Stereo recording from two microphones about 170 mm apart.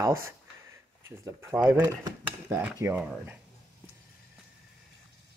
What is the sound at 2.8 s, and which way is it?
Speech, 10° right (ahead or behind).